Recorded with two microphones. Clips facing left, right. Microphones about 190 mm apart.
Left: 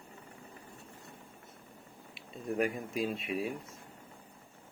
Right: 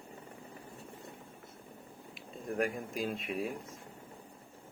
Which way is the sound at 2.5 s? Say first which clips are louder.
Left 2 dB; centre (ahead or behind).